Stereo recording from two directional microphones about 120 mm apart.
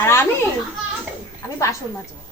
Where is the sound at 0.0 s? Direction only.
20° left (ahead or behind).